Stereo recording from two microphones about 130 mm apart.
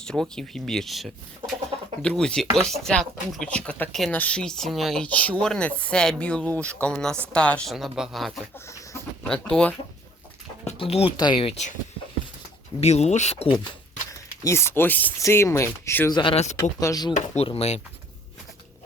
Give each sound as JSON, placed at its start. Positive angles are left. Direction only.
{"t": 0.0, "sound": "speech", "side_deg": 5}
{"t": 7.7, "sound": "speech", "side_deg": 0}
{"t": 8.5, "sound": "chicken", "side_deg": 20}
{"t": 9.2, "sound": "speech", "side_deg": 5}
{"t": 10.8, "sound": "speech", "side_deg": 50}
{"t": 12.8, "sound": "speech", "side_deg": 55}
{"t": 14.4, "sound": "speech", "side_deg": 20}
{"t": 16.3, "sound": "speech", "side_deg": 55}
{"t": 16.8, "sound": "speech", "side_deg": 30}
{"t": 17.2, "sound": "speech", "side_deg": 60}